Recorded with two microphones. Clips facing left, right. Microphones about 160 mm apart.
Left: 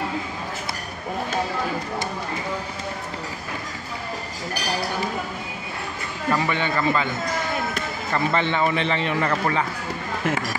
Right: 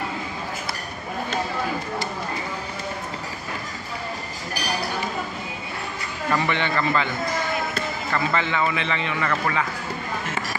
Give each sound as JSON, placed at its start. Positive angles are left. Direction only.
{"t": 6.3, "sound": "a man's voice", "side_deg": 10}
{"t": 7.7, "sound": "music", "side_deg": 25}
{"t": 8.6, "sound": "a man's voice", "side_deg": 35}